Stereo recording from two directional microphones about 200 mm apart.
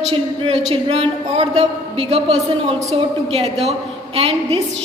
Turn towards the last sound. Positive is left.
turn(degrees=-30)  # may be behind; listen again after turning